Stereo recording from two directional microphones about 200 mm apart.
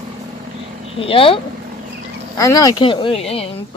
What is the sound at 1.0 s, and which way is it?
Speech, 25° left (ahead or behind).